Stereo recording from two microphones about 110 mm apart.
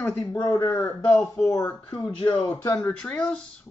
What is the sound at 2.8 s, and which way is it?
Speech, 10° left (ahead or behind).